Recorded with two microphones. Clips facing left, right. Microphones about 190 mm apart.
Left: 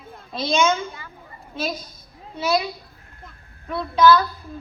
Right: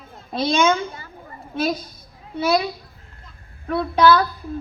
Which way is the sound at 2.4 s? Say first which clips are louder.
Right 2 dB; 55° right (ahead or behind).